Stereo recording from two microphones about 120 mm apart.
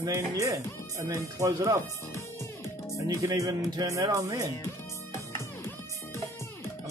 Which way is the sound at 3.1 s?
25° right (ahead or behind).